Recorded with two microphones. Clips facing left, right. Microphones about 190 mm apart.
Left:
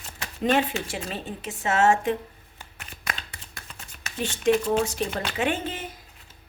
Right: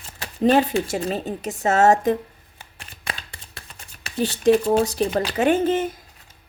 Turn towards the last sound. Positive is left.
turn(degrees=-45)  # may be behind; listen again after turning